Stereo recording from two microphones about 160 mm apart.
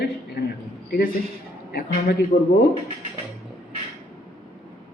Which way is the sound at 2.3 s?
55° left (ahead or behind).